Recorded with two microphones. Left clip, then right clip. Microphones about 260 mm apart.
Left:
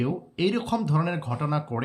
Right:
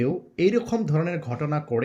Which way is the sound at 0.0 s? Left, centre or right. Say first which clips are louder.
Right 4 dB; centre.